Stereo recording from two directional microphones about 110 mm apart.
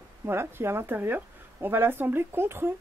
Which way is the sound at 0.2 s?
20° right (ahead or behind).